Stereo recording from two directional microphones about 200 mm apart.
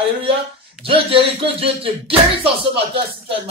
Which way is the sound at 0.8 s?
25° right (ahead or behind).